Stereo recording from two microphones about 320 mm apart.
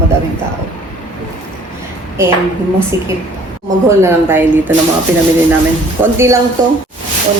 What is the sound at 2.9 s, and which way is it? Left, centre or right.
Speech, centre.